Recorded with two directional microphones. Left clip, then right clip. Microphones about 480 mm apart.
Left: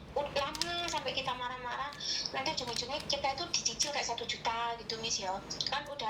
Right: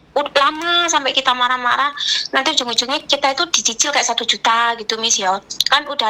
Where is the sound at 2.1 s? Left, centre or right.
Right.